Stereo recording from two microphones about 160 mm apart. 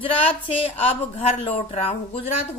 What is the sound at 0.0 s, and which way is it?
A woman's voice, 35° left (ahead or behind).